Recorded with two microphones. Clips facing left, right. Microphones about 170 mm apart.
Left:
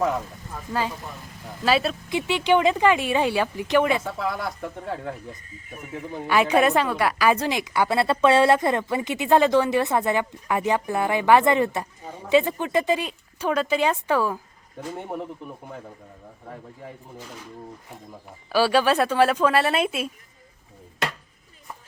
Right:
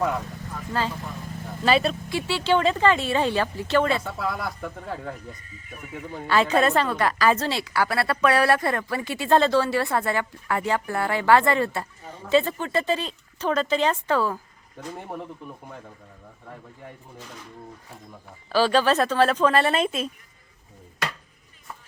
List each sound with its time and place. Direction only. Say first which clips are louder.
0.7 s a woman's voice: even; 10° left (ahead or behind)
2.0 s a woman's voice: left 2 dB; 20° left (ahead or behind)
4.0 s speech: left 1 dB; centre (ahead or behind)
5.7 s speech: left 2 dB; 40° left (ahead or behind)
6.1 s a woman's voice: left 1 dB; 15° left (ahead or behind)
14.8 s speech: left 3 dB; centre (ahead or behind)
18.4 s a woman's voice: even; 10° left (ahead or behind)